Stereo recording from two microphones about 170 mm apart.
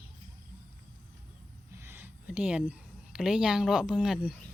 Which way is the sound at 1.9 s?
10° right (ahead or behind).